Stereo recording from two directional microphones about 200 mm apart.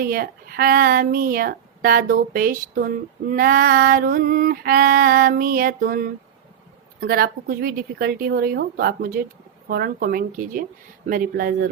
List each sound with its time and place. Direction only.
0.0 s a woman's voice: 45° right (ahead or behind)